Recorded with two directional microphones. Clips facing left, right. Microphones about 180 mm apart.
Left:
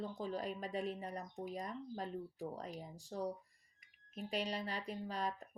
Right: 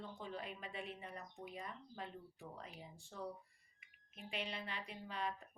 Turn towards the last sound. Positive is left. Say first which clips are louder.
# left 4 dB
turn(degrees=40)  # may be behind; listen again after turning